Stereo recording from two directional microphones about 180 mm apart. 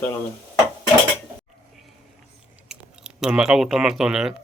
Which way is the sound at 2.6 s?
5° right (ahead or behind).